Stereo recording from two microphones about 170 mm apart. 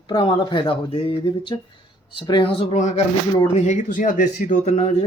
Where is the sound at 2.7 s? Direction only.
45° left (ahead or behind).